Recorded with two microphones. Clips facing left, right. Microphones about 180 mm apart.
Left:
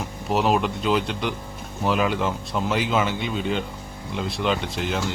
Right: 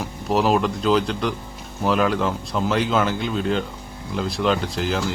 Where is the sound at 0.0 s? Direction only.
Centre (ahead or behind).